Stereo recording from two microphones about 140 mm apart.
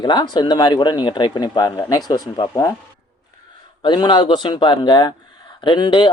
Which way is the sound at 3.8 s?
35° left (ahead or behind).